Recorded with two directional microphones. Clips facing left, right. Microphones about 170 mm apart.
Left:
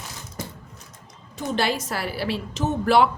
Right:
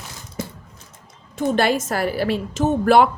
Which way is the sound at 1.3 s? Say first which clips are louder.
Right 6 dB; 50° right (ahead or behind).